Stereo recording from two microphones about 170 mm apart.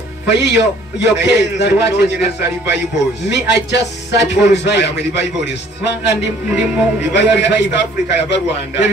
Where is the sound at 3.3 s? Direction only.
90° left.